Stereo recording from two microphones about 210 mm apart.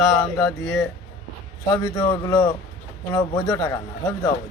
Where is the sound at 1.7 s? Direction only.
20° left (ahead or behind).